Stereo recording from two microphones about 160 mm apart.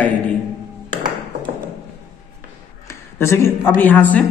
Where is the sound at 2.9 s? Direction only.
15° left (ahead or behind).